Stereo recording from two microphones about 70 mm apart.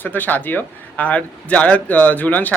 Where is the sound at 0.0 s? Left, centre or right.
Left.